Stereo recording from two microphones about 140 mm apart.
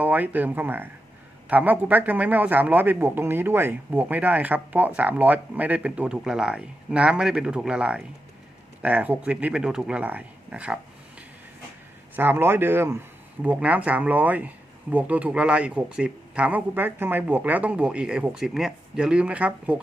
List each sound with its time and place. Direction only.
0.0 s speech: 10° right (ahead or behind)
12.1 s speech: 15° right (ahead or behind)